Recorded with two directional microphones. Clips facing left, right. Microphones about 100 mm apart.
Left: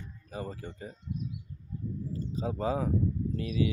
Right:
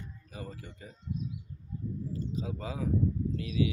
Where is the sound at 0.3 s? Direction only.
35° left (ahead or behind).